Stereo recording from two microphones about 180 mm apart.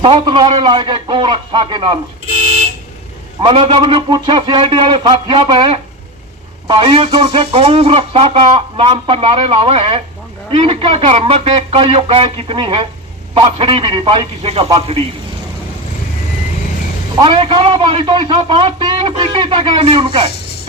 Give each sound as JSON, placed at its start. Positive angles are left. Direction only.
{"t": 0.0, "sound": "a man's voice", "side_deg": -25}
{"t": 3.4, "sound": "a man's voice", "side_deg": -25}
{"t": 17.2, "sound": "a man's voice", "side_deg": -30}